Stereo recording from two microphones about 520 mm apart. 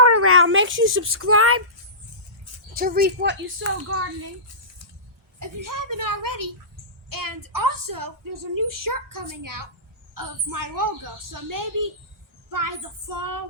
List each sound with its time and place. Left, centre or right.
0.0 s speech: right
2.7 s a woman's voice: centre
5.4 s a woman's voice: right